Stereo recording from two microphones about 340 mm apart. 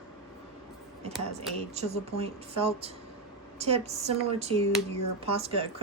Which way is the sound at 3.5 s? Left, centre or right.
Centre.